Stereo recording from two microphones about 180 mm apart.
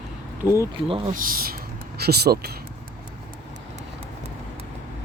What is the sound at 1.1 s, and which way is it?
Speech, 50° right (ahead or behind).